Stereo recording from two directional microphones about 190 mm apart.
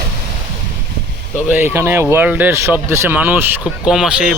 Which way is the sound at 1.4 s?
10° right (ahead or behind).